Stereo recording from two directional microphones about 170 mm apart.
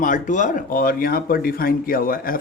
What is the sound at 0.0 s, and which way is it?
Speech, 50° left (ahead or behind).